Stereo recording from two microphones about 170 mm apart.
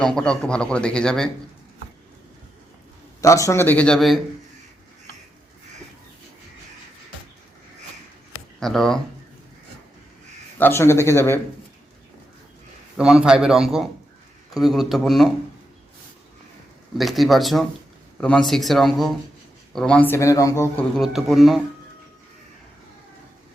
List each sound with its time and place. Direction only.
0.0 s a man's voice: 5° left (ahead or behind)
3.2 s speech: 20° left (ahead or behind); by 4.2 s centre (ahead or behind)
8.6 s a man's voice: 5° left (ahead or behind)
10.6 s speech: 15° left (ahead or behind)
13.0 s a man's voice: 5° right (ahead or behind)
17.0 s a man's voice: centre (ahead or behind); by 20.7 s 20° left (ahead or behind)
20.7 s a man's voice: centre (ahead or behind)